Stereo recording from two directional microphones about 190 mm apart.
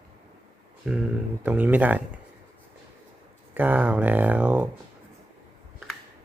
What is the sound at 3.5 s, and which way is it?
Speech, 10° right (ahead or behind).